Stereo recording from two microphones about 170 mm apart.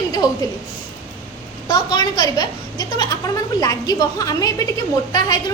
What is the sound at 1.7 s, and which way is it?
A woman's voice, 25° left (ahead or behind).